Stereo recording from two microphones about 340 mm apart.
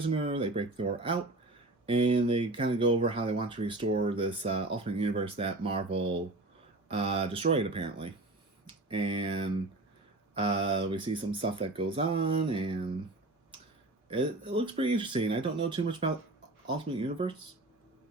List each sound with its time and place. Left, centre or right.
0.0 s speech: centre
8.6 s a sound: centre
10.3 s speech: centre
14.1 s speech: centre